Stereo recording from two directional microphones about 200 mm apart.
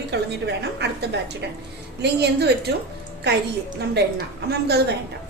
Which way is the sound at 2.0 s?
55° right (ahead or behind).